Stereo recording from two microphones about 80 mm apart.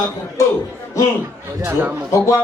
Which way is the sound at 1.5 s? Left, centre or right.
Right.